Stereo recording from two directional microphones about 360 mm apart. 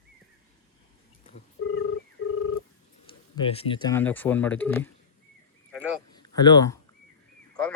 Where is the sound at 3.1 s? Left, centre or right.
Centre.